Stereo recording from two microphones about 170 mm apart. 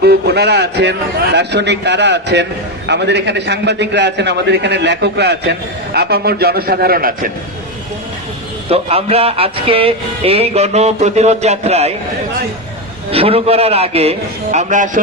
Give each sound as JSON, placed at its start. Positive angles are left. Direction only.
{"t": 0.0, "sound": "a man's voice", "side_deg": -70}
{"t": 8.7, "sound": "speech", "side_deg": -35}
{"t": 13.1, "sound": "speech", "side_deg": -35}